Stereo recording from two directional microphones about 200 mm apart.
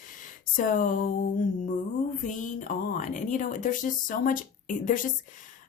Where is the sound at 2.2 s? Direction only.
40° left (ahead or behind).